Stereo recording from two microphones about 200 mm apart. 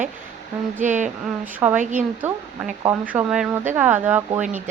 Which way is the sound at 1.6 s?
10° right (ahead or behind).